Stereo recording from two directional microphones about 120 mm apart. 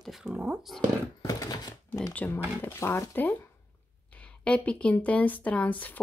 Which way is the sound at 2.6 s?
20° left (ahead or behind).